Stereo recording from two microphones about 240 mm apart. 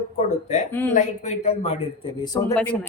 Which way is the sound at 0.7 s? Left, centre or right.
Centre.